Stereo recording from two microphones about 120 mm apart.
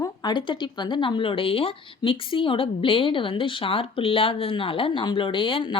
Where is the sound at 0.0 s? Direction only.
35° left (ahead or behind).